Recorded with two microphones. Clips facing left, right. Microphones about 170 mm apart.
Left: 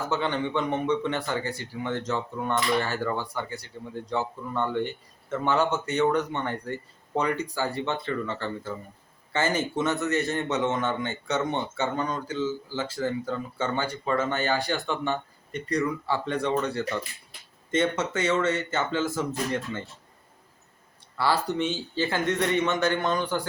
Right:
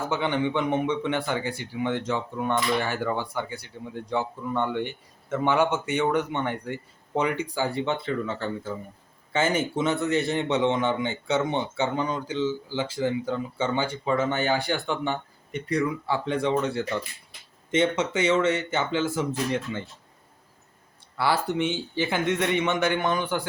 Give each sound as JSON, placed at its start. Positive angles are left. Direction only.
{"t": 0.1, "sound": "speech", "side_deg": -10}
{"t": 17.7, "sound": "speech", "side_deg": -10}
{"t": 21.2, "sound": "speech", "side_deg": -15}